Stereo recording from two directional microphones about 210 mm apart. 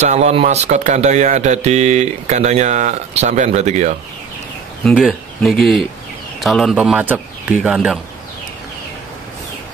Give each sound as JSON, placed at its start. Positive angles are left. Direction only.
{"t": 0.0, "sound": "speech", "side_deg": -30}
{"t": 4.8, "sound": "a man's voice", "side_deg": 0}